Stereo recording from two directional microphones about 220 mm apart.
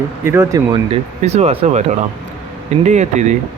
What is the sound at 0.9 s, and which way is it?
Speech, 30° right (ahead or behind).